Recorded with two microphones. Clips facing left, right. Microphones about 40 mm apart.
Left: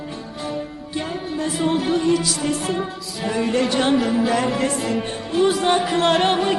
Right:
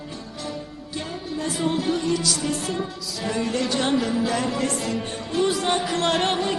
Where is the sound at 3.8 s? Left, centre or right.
Centre.